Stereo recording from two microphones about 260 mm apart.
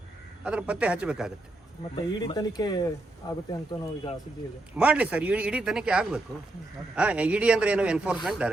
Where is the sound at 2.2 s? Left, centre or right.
Centre.